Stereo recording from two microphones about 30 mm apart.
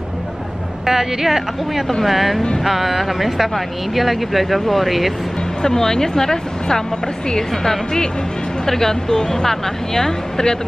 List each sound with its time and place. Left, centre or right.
0.8 s speech: centre
5.6 s speech: centre